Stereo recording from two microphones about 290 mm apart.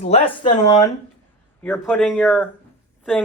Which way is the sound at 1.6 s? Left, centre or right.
Centre.